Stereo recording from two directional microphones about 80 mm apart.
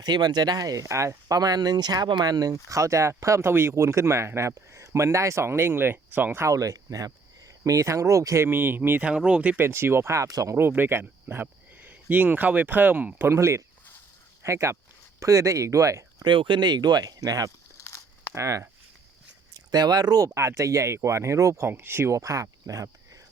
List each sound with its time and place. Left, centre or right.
0.0 s speech: right
2.6 s speech: right
6.4 s speech: right
8.4 s speech: right
9.0 s speech: centre
9.6 s speech: right
10.5 s speech: right
13.3 s speech: right
16.2 s speech: right
17.7 s crumpling: left
18.3 s speech: right
19.5 s speech: right
21.7 s speech: right
22.1 s speech: right